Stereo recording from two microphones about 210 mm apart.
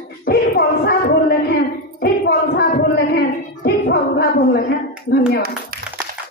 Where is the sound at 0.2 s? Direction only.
45° left (ahead or behind).